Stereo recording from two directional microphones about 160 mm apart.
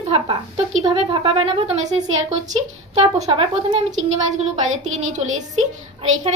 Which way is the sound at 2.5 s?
45° right (ahead or behind).